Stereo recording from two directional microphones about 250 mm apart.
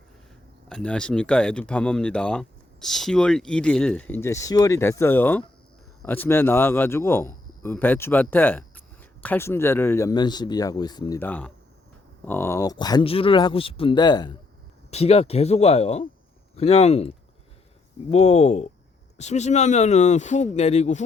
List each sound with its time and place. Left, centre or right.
0.7 s a man's voice: centre; by 17.1 s left
18.1 s speech: left